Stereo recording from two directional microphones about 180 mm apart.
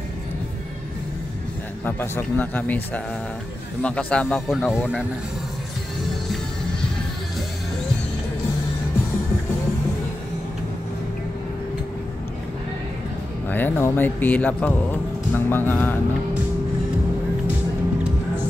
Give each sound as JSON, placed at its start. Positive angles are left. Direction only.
{"t": 1.9, "sound": "speech", "side_deg": 10}
{"t": 13.5, "sound": "speech", "side_deg": 10}